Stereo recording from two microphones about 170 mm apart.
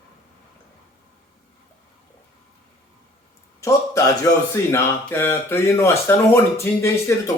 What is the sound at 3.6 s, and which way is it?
Speech, 20° left (ahead or behind).